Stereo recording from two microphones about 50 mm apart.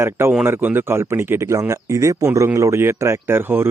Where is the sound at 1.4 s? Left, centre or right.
Right.